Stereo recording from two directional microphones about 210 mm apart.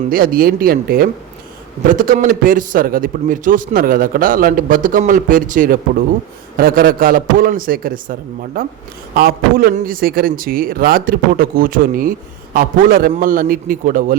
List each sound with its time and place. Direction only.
0.1 s a man's voice: 45° right (ahead or behind)